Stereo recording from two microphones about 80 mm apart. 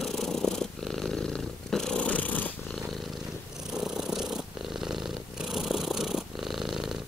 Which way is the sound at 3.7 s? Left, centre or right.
Centre.